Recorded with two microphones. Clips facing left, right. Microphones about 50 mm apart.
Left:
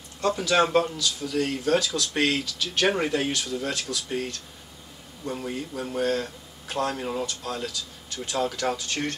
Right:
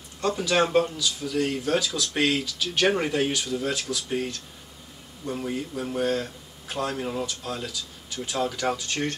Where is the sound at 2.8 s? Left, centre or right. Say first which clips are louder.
Right 1 dB; centre.